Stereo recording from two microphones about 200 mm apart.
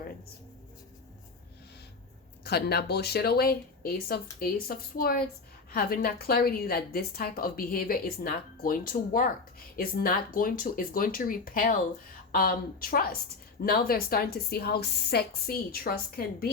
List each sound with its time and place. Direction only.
2.4 s a woman's voice: 55° left (ahead or behind)